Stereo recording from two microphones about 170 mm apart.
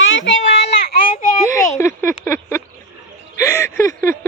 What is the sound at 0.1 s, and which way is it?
Baby cry, 90° left.